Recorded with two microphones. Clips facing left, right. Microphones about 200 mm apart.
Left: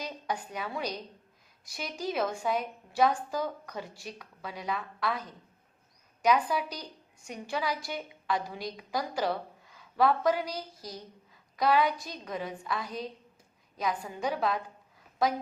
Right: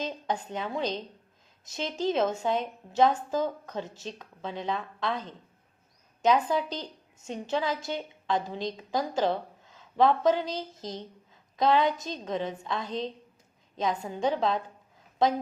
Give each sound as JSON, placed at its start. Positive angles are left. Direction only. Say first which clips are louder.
{"t": 0.0, "sound": "a woman's voice", "louder": "right 4 dB", "side_deg": -25}